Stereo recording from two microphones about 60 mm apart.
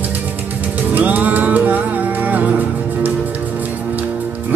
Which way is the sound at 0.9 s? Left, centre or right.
Right.